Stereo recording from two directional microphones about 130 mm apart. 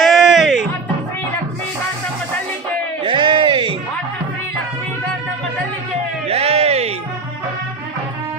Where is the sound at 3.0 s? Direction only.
40° right (ahead or behind).